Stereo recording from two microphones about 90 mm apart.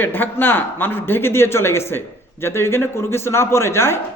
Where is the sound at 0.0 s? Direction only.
20° left (ahead or behind).